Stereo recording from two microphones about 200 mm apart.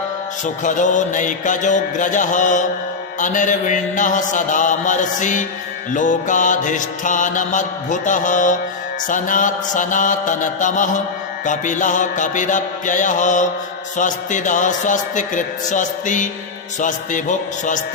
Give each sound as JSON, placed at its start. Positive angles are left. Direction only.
{"t": 0.4, "sound": "mantra", "side_deg": 40}